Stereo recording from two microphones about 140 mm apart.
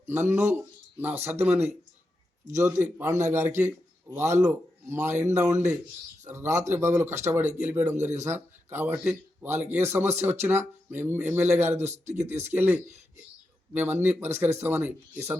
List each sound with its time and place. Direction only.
0.1 s a man's voice: 20° right (ahead or behind)